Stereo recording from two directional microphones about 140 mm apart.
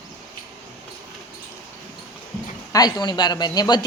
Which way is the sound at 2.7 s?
30° left (ahead or behind).